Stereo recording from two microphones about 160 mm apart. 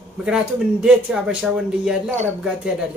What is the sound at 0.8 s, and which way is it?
Speech, 5° right (ahead or behind).